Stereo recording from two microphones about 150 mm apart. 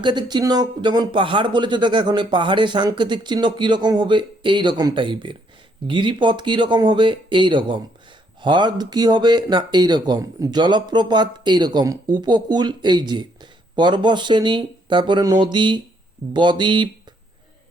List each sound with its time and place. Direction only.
0.0 s speech: 30° right (ahead or behind)